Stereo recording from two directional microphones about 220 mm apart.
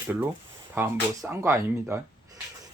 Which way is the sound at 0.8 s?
15° right (ahead or behind).